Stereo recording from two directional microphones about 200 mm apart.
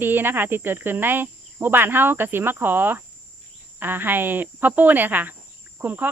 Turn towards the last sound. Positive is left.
turn(degrees=-10)  # may be behind; listen again after turning